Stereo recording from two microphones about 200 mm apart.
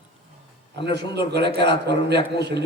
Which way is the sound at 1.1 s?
55° right (ahead or behind).